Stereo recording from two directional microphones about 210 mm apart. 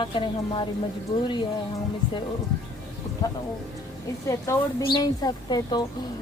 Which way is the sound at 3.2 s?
20° left (ahead or behind).